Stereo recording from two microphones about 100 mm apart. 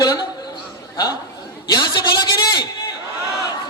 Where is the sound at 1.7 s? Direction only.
45° left (ahead or behind).